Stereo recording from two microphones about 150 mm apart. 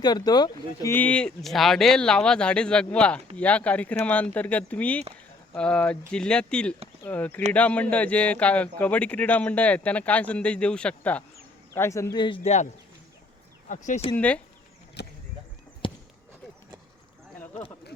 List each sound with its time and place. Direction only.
0.0 s speech: 30° left (ahead or behind)
0.9 s speech: 10° left (ahead or behind)
11.7 s speech: 20° left (ahead or behind)
12.5 s speech: 45° left (ahead or behind)
13.7 s speech: 50° left (ahead or behind)
14.2 s speech: 10° left (ahead or behind)
15.0 s speech: 90° left